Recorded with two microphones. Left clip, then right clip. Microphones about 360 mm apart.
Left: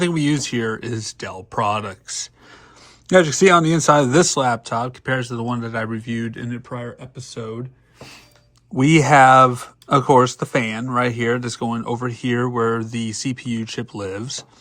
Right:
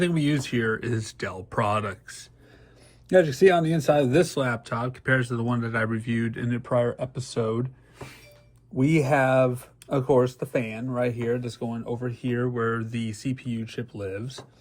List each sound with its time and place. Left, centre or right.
0.0 s speech: centre
8.8 s speech: left